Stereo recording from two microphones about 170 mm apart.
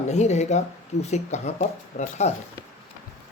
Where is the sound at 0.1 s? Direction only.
40° left (ahead or behind).